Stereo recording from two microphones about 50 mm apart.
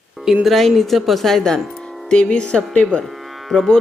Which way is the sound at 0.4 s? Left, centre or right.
Centre.